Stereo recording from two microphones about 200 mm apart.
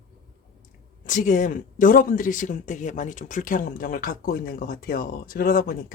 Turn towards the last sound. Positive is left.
turn(degrees=45)  # may be behind; listen again after turning